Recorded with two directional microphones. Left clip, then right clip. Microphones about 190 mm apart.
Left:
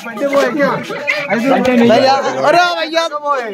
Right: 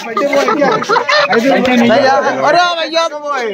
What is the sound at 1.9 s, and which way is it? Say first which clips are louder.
Speech: right 2 dB; 20° left (ahead or behind).